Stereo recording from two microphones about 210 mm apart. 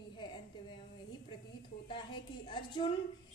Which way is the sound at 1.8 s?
25° left (ahead or behind).